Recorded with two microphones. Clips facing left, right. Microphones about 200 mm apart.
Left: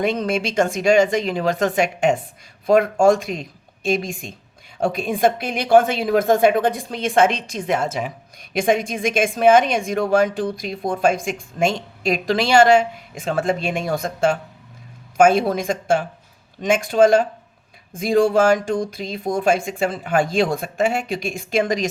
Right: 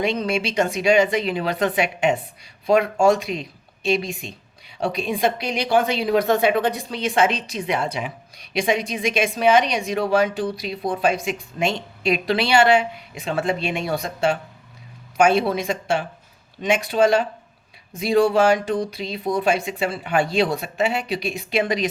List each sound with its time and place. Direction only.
0.0 s a woman's voice: 50° left (ahead or behind)